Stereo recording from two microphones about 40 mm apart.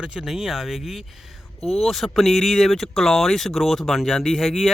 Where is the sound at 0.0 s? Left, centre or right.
Right.